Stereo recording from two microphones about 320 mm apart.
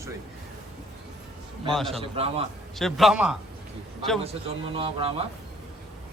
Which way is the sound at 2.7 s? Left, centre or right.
Centre.